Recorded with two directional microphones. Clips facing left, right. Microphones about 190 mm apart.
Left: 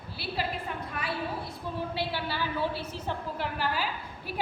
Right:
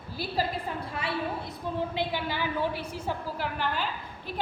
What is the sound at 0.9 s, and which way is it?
A woman's voice, 25° right (ahead or behind).